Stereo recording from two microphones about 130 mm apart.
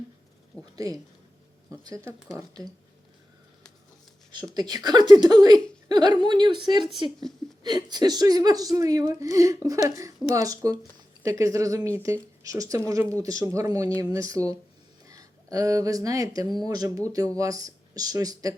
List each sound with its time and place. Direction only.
0.6 s a woman's voice: 25° right (ahead or behind)
2.1 s speech: centre (ahead or behind)
4.5 s a woman's voice: 35° right (ahead or behind)